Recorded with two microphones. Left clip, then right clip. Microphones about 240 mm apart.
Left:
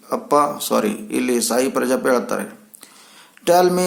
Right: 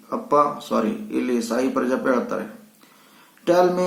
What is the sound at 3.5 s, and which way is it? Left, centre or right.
Speech, left.